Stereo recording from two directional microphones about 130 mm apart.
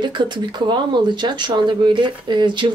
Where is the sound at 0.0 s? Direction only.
35° right (ahead or behind).